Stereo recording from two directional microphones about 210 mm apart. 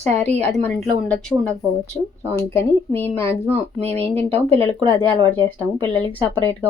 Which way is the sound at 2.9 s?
10° left (ahead or behind).